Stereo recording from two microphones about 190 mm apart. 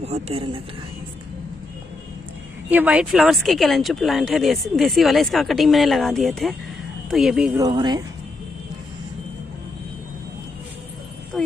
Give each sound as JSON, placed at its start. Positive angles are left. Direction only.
{"t": 0.0, "sound": "speech", "side_deg": -30}
{"t": 2.7, "sound": "speech", "side_deg": -10}
{"t": 7.5, "sound": "speech", "side_deg": -20}
{"t": 11.3, "sound": "wind chime", "side_deg": 0}